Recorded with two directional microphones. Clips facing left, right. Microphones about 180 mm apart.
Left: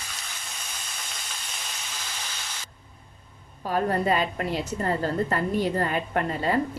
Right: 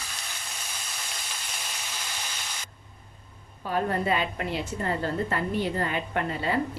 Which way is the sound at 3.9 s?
40° left (ahead or behind).